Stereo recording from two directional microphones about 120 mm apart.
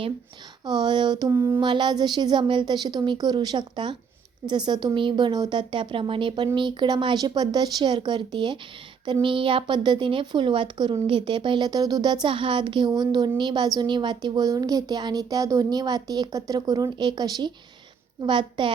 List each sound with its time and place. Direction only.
0.6 s speech: 35° right (ahead or behind)
1.3 s a sound: 25° right (ahead or behind)
1.6 s speech: 40° right (ahead or behind)